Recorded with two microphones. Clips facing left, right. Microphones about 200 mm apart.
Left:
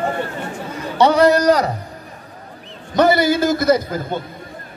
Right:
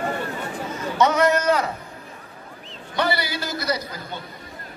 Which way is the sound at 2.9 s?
45° left (ahead or behind).